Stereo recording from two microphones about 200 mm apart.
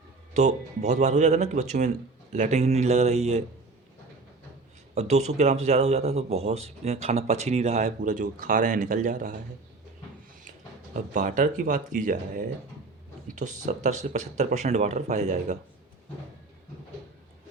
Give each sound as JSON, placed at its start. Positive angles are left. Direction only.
{"t": 0.3, "sound": "a man's voice", "side_deg": -35}
{"t": 4.9, "sound": "a man's voice", "side_deg": -35}
{"t": 10.9, "sound": "a man's voice", "side_deg": -35}